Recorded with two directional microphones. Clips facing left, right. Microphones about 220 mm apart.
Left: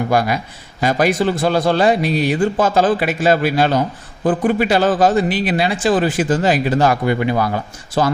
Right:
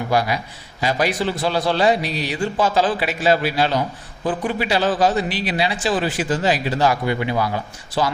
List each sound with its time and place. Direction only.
0.1 s a man's voice: 50° left (ahead or behind)